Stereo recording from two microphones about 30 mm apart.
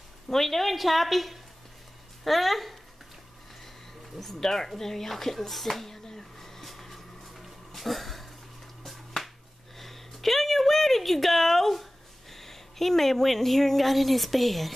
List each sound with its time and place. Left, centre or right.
0.3 s a woman's voice: centre
4.2 s a woman's voice: centre
5.9 s a sound: centre
9.8 s a woman's voice: centre